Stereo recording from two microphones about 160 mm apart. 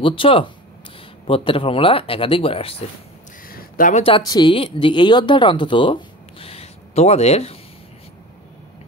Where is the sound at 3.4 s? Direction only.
60° left (ahead or behind).